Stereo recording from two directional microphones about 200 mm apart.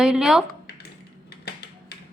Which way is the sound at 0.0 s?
Centre (ahead or behind).